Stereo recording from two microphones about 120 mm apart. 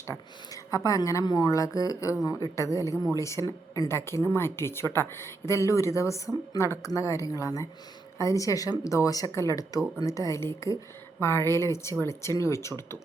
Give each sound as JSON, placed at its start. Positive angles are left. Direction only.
{"t": 0.5, "sound": "speech", "side_deg": 30}